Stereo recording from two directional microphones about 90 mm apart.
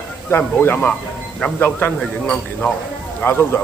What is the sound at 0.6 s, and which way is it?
Speech, 25° left (ahead or behind).